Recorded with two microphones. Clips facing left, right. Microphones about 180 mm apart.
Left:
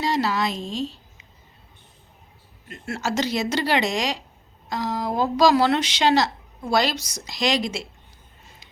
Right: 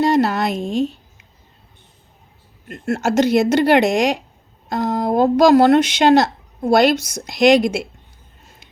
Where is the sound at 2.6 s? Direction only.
50° right (ahead or behind).